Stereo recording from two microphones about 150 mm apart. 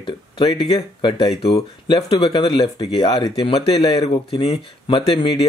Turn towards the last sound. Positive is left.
turn(degrees=40)  # may be behind; listen again after turning